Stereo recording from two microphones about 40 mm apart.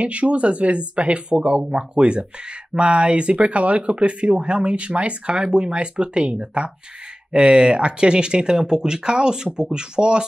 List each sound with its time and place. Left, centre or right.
0.0 s speech: right